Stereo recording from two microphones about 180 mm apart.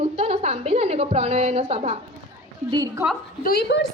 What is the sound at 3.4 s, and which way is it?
Speech, 60° left (ahead or behind).